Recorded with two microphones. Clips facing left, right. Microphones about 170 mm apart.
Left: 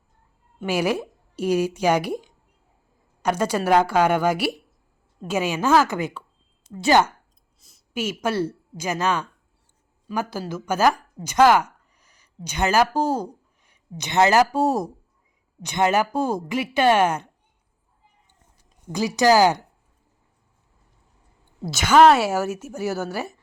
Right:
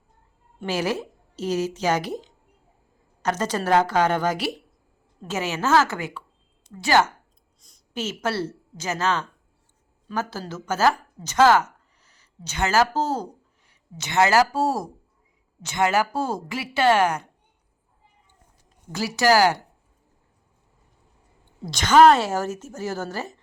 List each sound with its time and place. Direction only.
0.6 s a woman's voice: 10° left (ahead or behind)
7.6 s a woman's voice: 5° left (ahead or behind)
18.9 s a woman's voice: 15° left (ahead or behind)
21.7 s a woman's voice: 5° left (ahead or behind)